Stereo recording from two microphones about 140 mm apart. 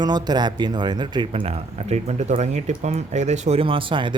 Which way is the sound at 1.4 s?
50° right (ahead or behind).